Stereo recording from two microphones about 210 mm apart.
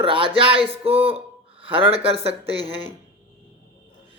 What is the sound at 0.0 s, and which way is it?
Speech, 25° right (ahead or behind).